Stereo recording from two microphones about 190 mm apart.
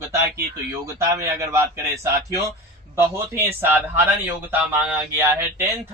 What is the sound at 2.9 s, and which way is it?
Speech, 10° right (ahead or behind).